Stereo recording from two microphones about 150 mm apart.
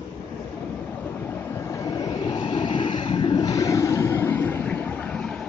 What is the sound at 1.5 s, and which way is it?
Vehicle, 20° left (ahead or behind).